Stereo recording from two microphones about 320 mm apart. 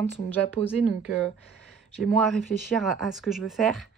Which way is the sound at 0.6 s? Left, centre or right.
Centre.